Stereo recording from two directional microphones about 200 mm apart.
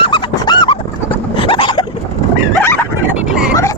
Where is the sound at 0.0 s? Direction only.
25° left (ahead or behind).